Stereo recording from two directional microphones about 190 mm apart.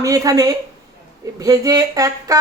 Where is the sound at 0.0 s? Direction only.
20° right (ahead or behind).